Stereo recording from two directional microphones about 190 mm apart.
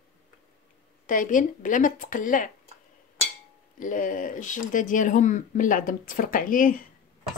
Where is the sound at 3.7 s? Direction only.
45° left (ahead or behind).